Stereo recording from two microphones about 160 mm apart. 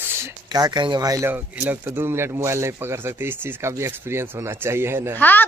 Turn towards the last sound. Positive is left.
turn(degrees=10)  # may be behind; listen again after turning